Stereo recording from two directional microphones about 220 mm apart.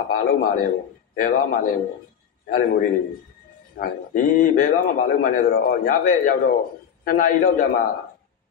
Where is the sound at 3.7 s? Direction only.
40° left (ahead or behind).